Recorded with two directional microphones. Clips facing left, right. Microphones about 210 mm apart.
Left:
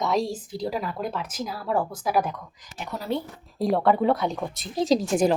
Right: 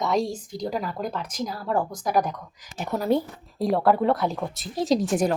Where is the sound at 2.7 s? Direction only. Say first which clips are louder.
Right 6 dB; 45° right (ahead or behind).